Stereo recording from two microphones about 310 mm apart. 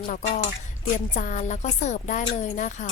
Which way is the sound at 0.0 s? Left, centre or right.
Centre.